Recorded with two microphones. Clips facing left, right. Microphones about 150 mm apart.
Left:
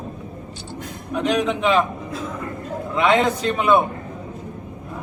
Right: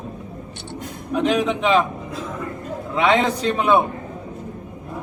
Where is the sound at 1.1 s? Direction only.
Centre (ahead or behind).